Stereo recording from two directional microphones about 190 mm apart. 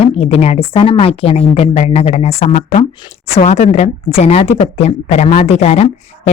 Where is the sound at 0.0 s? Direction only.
30° left (ahead or behind).